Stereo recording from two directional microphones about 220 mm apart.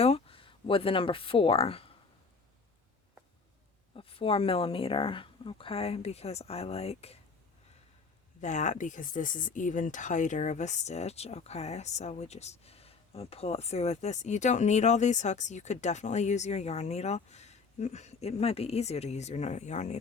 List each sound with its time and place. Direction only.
0.0 s speech: 25° left (ahead or behind)
3.9 s speech: 25° left (ahead or behind)
8.4 s speech: 35° left (ahead or behind)